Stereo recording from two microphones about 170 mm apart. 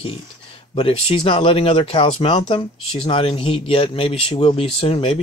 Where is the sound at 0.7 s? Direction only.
30° left (ahead or behind).